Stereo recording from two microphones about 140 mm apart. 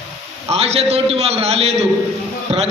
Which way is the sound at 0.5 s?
45° right (ahead or behind).